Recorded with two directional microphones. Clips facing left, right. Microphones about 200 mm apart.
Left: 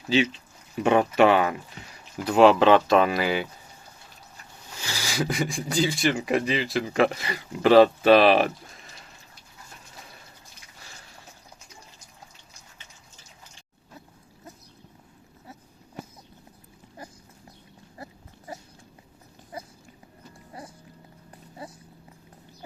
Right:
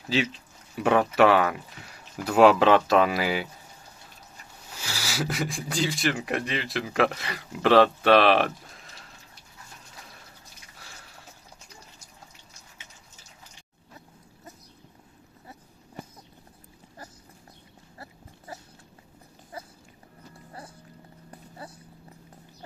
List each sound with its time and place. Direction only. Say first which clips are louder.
0.8 s speech: left 1 dB; centre (ahead or behind)
4.8 s speech: left 2 dB; 5° right (ahead or behind)
17.9 s dog: left 3 dB; 20° left (ahead or behind)